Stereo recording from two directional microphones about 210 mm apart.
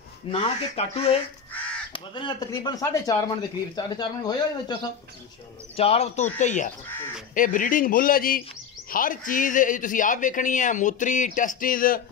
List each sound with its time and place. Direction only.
0.3 s speech: 25° left (ahead or behind)
5.8 s a man's voice: 30° left (ahead or behind)